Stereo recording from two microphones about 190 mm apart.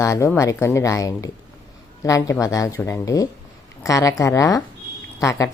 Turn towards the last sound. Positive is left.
turn(degrees=15)  # may be behind; listen again after turning